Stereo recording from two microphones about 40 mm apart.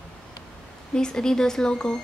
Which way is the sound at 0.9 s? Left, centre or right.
Centre.